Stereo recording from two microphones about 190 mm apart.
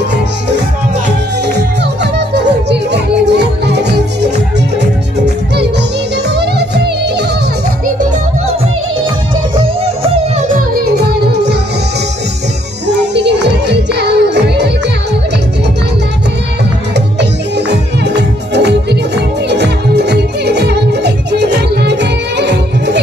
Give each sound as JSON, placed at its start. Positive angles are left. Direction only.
{"t": 2.1, "sound": "music", "side_deg": -60}
{"t": 9.8, "sound": "music", "side_deg": -35}
{"t": 12.8, "sound": "music", "side_deg": -65}
{"t": 16.9, "sound": "music", "side_deg": -65}